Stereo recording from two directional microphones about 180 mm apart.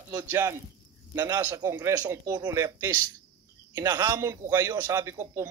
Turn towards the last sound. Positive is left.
turn(degrees=-15)  # may be behind; listen again after turning